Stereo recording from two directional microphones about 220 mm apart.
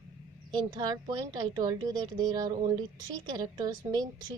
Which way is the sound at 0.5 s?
20° right (ahead or behind).